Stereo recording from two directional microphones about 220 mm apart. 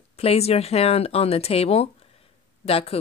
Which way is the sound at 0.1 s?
25° left (ahead or behind).